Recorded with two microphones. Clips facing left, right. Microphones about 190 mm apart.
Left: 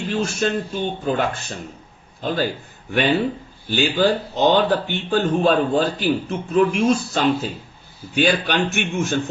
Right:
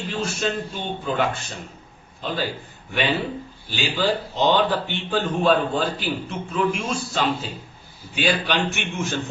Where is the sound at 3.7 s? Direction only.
50° left (ahead or behind).